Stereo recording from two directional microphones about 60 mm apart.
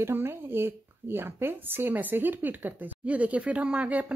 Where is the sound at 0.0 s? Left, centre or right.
Right.